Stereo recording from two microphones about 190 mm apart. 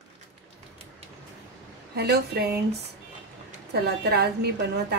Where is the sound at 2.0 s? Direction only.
55° right (ahead or behind).